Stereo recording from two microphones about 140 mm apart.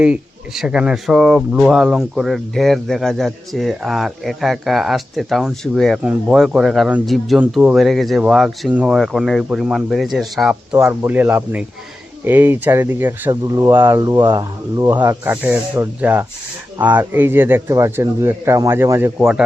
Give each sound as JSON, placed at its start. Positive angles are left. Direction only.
{"t": 0.0, "sound": "speech", "side_deg": -5}
{"t": 10.8, "sound": "speech", "side_deg": -10}
{"t": 15.2, "sound": "speech", "side_deg": -15}